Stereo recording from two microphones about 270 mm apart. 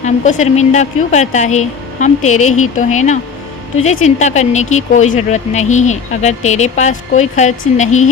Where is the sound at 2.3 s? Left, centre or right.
Left.